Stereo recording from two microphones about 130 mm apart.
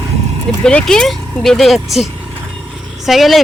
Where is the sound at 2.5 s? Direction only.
Centre (ahead or behind).